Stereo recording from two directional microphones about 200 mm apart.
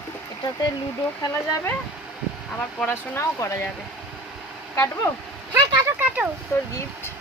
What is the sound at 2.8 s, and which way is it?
Speech, 10° left (ahead or behind).